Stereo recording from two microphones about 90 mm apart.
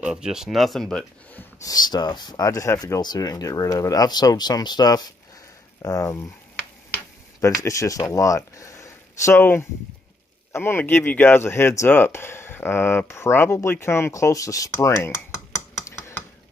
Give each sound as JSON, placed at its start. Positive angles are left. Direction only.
{"t": 0.0, "sound": "speech", "side_deg": -10}
{"t": 0.8, "sound": "speech", "side_deg": 10}
{"t": 1.6, "sound": "speech", "side_deg": 45}
{"t": 3.0, "sound": "speech", "side_deg": 45}
{"t": 7.6, "sound": "speech", "side_deg": 35}